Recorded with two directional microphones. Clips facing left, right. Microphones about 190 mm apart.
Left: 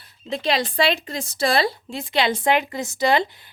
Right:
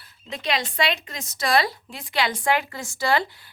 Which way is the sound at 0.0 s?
30° left (ahead or behind).